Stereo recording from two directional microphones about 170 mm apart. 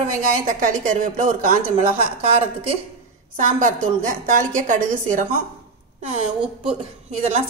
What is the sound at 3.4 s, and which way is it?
A woman's voice, 50° right (ahead or behind).